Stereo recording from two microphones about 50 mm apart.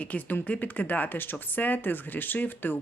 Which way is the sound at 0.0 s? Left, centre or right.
Left.